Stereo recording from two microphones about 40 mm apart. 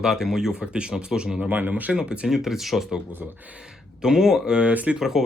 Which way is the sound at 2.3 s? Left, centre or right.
Centre.